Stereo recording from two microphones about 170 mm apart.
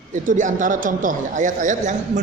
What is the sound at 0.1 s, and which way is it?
Speech, 50° right (ahead or behind).